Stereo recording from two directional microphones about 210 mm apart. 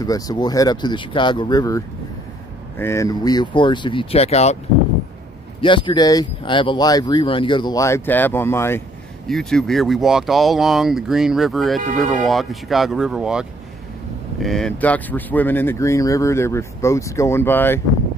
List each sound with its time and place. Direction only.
0.0 s speech: 15° left (ahead or behind)
5.6 s speech: 25° left (ahead or behind)